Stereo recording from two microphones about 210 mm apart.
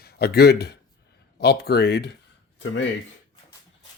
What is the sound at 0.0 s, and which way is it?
Speech, 50° left (ahead or behind).